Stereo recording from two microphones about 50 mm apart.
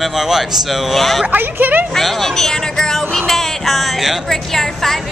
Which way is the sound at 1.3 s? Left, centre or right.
Right.